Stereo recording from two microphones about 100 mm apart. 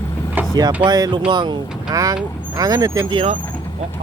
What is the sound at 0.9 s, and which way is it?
Speech, 40° right (ahead or behind).